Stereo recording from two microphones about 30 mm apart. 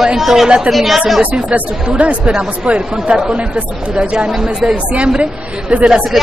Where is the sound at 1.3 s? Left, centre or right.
Right.